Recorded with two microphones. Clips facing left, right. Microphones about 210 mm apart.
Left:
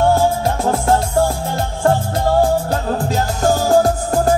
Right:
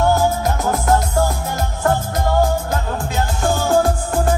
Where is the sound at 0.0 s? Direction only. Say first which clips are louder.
Left 2 dB; 30° left (ahead or behind).